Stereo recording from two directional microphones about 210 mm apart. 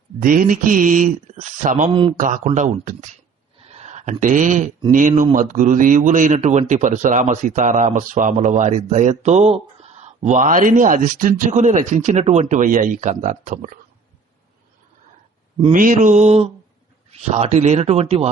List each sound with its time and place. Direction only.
0.2 s a man's voice: 40° right (ahead or behind)
1.9 s speech: 25° right (ahead or behind)
2.1 s a man's voice: 35° right (ahead or behind)
3.6 s a sound: 30° right (ahead or behind)
4.9 s a man's voice: 40° right (ahead or behind)
15.7 s a man's voice: 40° right (ahead or behind)